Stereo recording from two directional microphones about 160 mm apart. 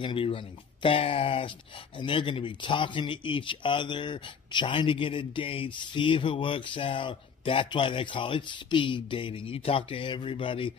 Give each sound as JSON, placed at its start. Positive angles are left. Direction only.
{"t": 0.0, "sound": "speech", "side_deg": 30}